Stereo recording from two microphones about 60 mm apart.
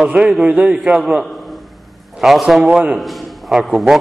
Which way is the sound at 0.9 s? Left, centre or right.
Centre.